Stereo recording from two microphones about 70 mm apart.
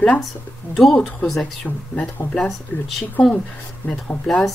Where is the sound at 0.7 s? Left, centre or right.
Centre.